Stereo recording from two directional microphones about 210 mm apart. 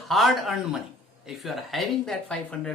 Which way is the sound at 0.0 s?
Centre (ahead or behind).